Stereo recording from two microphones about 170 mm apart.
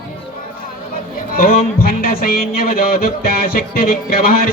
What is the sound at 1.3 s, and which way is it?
Speech, 60° left (ahead or behind).